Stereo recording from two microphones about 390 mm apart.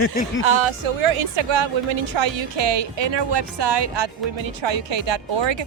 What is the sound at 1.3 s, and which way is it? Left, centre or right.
Speech, right.